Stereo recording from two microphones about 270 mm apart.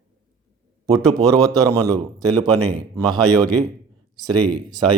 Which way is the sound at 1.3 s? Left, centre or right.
Centre.